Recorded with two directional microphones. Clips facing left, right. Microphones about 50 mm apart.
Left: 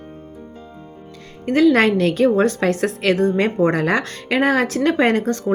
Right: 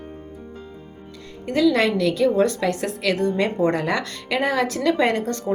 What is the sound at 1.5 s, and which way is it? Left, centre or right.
A woman's voice, left.